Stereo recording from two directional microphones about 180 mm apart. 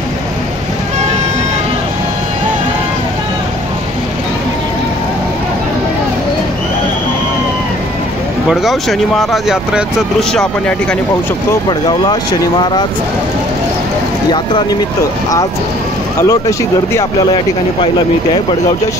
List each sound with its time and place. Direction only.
8.5 s speech: centre (ahead or behind)
12.1 s speech: 25° left (ahead or behind)
14.3 s speech: 25° left (ahead or behind)